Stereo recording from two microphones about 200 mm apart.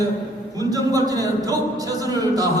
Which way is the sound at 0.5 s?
20° right (ahead or behind).